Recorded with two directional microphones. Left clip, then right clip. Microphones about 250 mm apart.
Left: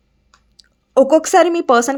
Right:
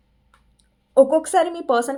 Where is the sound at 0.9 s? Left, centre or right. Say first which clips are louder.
Left 4 dB; left.